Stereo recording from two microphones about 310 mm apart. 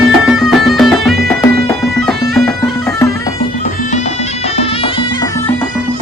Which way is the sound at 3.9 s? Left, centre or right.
Left.